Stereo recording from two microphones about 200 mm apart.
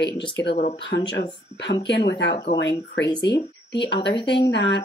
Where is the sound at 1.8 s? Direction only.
60° left (ahead or behind).